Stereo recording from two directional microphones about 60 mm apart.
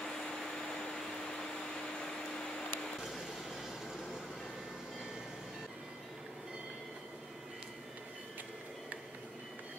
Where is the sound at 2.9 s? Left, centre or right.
Centre.